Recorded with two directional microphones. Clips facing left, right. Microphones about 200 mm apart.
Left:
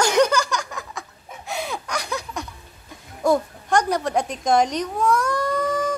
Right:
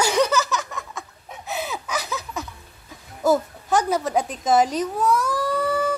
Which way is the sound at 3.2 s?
5° right (ahead or behind).